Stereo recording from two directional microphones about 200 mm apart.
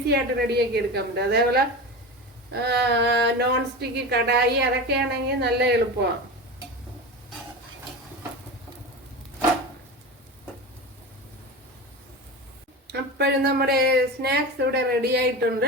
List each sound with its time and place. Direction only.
0.1 s speech: 55° right (ahead or behind)
12.9 s speech: 55° right (ahead or behind)